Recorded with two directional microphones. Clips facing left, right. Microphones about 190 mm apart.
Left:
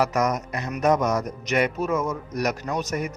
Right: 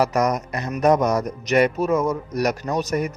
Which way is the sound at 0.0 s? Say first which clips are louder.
Right 3 dB; 35° right (ahead or behind).